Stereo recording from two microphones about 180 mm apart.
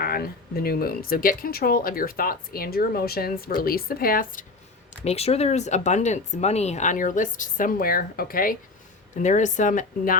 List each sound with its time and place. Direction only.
0.0 s speech: 55° left (ahead or behind)
5.0 s a woman's voice: 35° left (ahead or behind)